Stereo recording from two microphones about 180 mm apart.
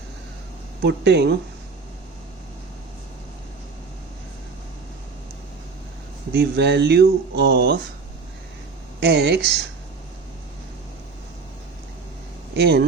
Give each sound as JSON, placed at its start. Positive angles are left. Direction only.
{"t": 0.8, "sound": "speech", "side_deg": -70}
{"t": 6.3, "sound": "speech", "side_deg": -65}
{"t": 9.0, "sound": "speech", "side_deg": -65}
{"t": 12.5, "sound": "speech", "side_deg": -65}